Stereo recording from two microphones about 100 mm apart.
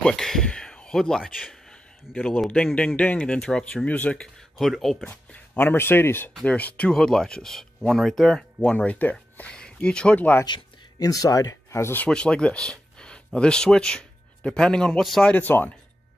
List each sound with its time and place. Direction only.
0.0 s speech: 5° left (ahead or behind)
5.0 s speech: 15° left (ahead or behind)
8.7 s speech: 15° left (ahead or behind)
10.4 s speech: 40° left (ahead or behind)
12.0 s speech: 10° left (ahead or behind)
15.3 s speech: 20° left (ahead or behind)